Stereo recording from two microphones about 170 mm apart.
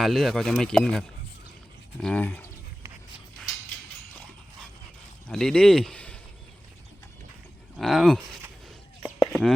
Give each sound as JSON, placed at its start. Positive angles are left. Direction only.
{"t": 0.0, "sound": "speech", "side_deg": 0}
{"t": 5.3, "sound": "speech", "side_deg": 5}
{"t": 7.8, "sound": "speech", "side_deg": 0}
{"t": 9.1, "sound": "a sound", "side_deg": 0}